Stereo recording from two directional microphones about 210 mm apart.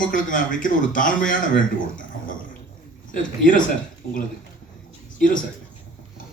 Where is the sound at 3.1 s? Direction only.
40° left (ahead or behind).